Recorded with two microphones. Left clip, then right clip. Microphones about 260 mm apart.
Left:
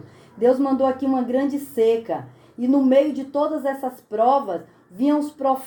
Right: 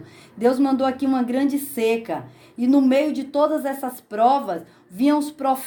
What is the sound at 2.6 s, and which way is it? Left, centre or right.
Speech, right.